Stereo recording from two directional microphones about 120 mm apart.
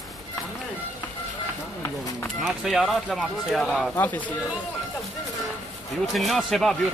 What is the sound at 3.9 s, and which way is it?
Speech, 15° left (ahead or behind).